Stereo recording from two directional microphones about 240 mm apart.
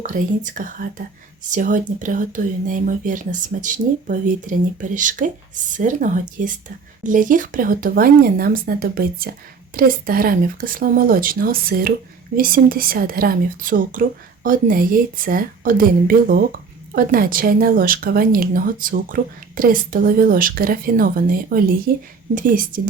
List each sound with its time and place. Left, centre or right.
0.0 s speech: right